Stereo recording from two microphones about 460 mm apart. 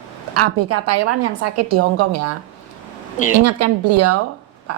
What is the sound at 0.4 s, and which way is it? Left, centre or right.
A woman's voice, right.